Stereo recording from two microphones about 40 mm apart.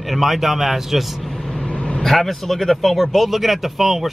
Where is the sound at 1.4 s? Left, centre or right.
Left.